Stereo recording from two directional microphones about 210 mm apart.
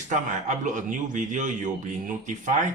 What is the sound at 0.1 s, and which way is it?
Speech, 35° right (ahead or behind).